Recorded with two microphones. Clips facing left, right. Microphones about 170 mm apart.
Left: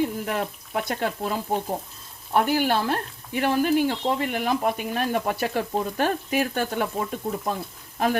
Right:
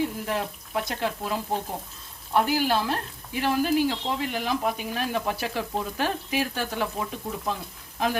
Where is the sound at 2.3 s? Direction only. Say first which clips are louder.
Left 2 dB; 55° left (ahead or behind).